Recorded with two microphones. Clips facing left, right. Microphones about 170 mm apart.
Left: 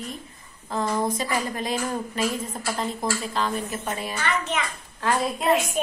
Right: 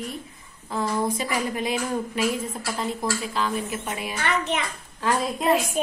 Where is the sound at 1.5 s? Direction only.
10° right (ahead or behind).